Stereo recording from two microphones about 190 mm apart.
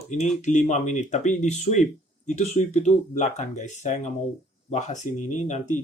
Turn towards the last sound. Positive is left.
turn(degrees=35)  # may be behind; listen again after turning